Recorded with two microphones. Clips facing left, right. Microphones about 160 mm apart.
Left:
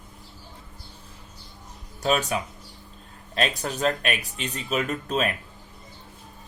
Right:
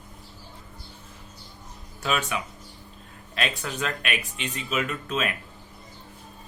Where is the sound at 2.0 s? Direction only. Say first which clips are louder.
Left 4 dB; 35° left (ahead or behind).